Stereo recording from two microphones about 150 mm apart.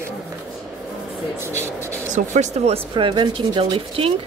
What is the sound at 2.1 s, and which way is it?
Speech, 50° right (ahead or behind).